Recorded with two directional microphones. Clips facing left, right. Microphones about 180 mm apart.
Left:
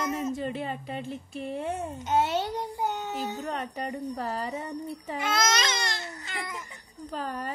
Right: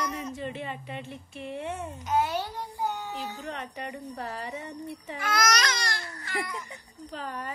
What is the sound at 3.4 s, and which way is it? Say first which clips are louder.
A woman's voice: left 4 dB; 40° left (ahead or behind).